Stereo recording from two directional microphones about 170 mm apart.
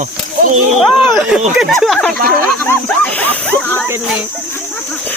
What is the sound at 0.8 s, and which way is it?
Speech, centre (ahead or behind).